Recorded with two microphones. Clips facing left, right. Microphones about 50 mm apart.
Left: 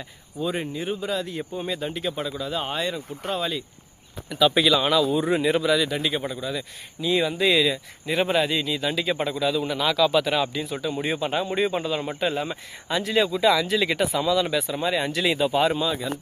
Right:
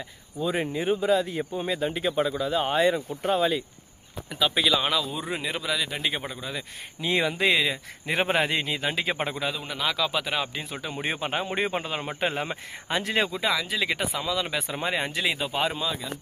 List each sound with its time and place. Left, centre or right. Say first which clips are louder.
0.3 s speech: right 1 dB; centre
5.9 s speech: left 4 dB; right
7.0 s speech: left 2 dB; right
7.4 s speech: left 3 dB; right
8.0 s a man's voice: left 2 dB; right
9.5 s speech: left 5 dB; centre
10.5 s a man's voice: left 6 dB; right
13.5 s speech: left 5 dB; centre
14.5 s speech: left 4 dB; right
15.2 s speech: left 7 dB; centre